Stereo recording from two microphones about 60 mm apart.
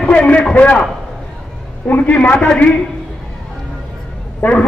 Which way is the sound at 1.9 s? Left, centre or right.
Left.